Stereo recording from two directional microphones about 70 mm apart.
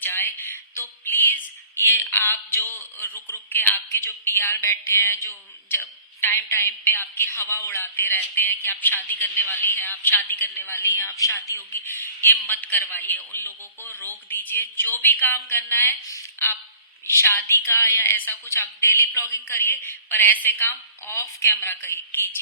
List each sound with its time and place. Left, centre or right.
0.0 s a woman's voice: left
1.8 s a woman's voice: left
3.2 s a woman's voice: left
18.0 s a woman's voice: left